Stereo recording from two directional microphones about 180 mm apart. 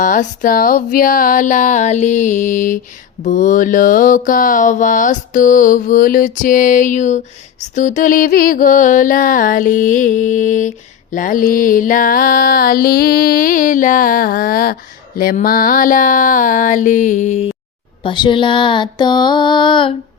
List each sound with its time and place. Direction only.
0.0 s mantra: 45° left (ahead or behind)
18.0 s mantra: 25° left (ahead or behind)